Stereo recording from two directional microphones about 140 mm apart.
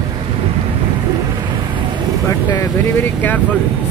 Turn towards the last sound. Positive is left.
turn(degrees=10)  # may be behind; listen again after turning